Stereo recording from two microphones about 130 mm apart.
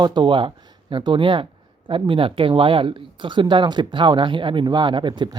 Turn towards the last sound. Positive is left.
turn(degrees=-40)  # may be behind; listen again after turning